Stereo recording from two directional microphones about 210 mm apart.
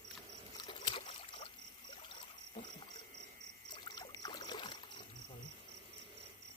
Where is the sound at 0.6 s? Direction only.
20° left (ahead or behind).